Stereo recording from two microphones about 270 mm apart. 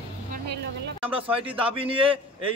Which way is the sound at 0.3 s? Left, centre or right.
Right.